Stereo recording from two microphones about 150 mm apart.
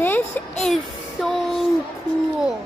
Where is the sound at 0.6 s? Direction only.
Centre (ahead or behind).